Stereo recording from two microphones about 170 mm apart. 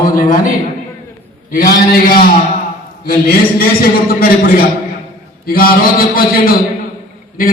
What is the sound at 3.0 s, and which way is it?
Speech, 60° left (ahead or behind).